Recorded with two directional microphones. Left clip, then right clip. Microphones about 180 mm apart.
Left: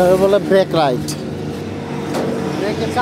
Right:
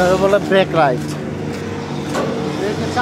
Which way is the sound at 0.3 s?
50° left (ahead or behind).